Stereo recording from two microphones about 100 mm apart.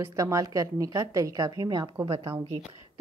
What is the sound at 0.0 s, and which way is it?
A woman's voice, 30° right (ahead or behind).